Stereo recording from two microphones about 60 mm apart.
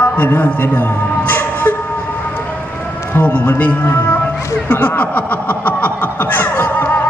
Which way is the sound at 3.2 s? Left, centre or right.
Left.